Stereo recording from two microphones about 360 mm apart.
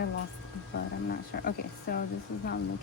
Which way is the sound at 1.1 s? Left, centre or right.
Left.